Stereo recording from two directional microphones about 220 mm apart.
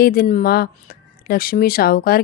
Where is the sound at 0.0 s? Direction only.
40° left (ahead or behind).